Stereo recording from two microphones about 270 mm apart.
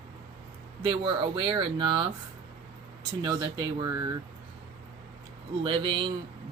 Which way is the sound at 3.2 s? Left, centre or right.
Centre.